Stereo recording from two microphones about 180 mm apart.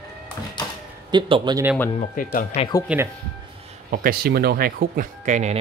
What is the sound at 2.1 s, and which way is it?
Speech, 50° left (ahead or behind).